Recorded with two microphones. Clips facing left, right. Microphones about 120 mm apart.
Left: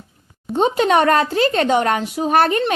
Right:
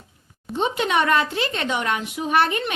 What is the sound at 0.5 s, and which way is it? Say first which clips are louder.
Speech: left 6 dB; 40° left (ahead or behind).